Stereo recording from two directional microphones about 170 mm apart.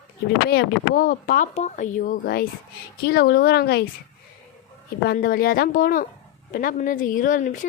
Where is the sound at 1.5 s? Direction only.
45° left (ahead or behind); by 3.8 s 70° left (ahead or behind).